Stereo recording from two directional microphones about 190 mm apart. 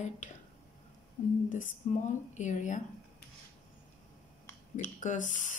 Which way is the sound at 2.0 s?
40° left (ahead or behind).